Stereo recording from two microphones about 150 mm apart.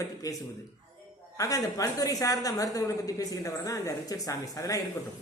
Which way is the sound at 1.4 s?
25° left (ahead or behind).